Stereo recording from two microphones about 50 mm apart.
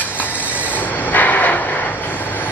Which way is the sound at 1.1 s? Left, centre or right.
Left.